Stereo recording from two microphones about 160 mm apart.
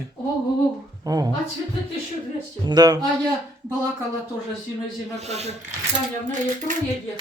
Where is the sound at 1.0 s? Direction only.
20° right (ahead or behind).